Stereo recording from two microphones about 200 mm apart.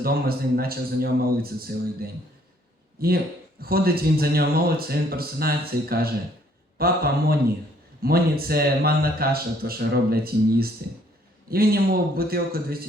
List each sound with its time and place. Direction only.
0.0 s a man's voice: 50° right (ahead or behind)